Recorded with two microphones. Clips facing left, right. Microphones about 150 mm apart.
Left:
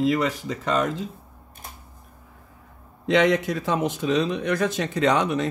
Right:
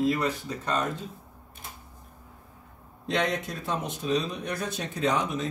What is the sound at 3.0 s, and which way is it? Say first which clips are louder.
A man's voice: left 8 dB; 90° left.